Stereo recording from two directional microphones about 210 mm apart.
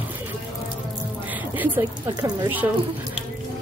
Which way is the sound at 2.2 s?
10° right (ahead or behind).